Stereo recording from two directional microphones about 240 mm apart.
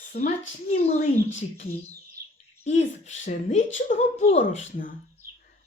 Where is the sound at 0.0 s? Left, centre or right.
Left.